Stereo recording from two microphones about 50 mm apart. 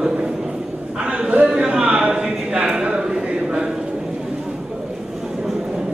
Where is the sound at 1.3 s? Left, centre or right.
Right.